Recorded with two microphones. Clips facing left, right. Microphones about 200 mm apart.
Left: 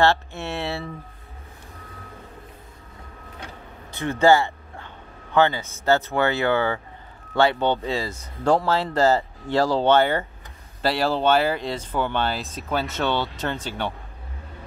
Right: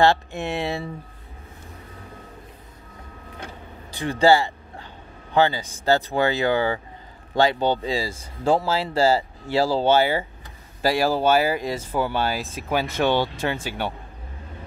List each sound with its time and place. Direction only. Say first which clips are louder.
0.0 s speech: right 1 dB; 15° right (ahead or behind)
3.9 s speech: even; 15° right (ahead or behind)
4.2 s a sound: even; 35° right (ahead or behind)
6.1 s speech: even; 35° right (ahead or behind)
7.7 s speech: right 1 dB; 10° right (ahead or behind)